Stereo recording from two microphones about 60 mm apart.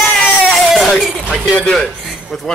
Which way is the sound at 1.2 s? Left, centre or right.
Left.